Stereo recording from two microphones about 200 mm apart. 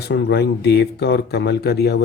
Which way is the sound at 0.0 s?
55° left (ahead or behind).